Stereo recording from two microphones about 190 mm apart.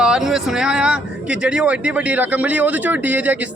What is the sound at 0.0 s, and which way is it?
Speech, centre (ahead or behind).